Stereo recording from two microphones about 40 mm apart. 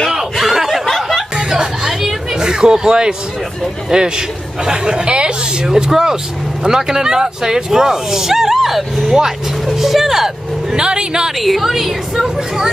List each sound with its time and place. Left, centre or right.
0.4 s snicker: centre
0.8 s a sound: centre
1.3 s a sound: centre
3.9 s speech: centre
5.7 s speech: centre
10.8 s speech: right
11.4 s a woman's voice: centre